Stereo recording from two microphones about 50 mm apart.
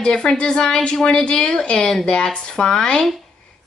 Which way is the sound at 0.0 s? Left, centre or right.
Centre.